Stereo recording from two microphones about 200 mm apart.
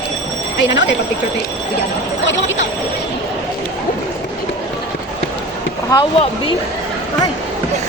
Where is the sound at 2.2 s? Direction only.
65° left (ahead or behind).